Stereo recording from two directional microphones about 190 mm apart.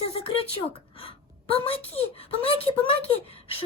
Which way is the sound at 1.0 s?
30° left (ahead or behind).